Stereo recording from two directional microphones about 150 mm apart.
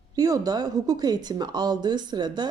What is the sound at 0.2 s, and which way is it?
A woman's voice, 25° right (ahead or behind).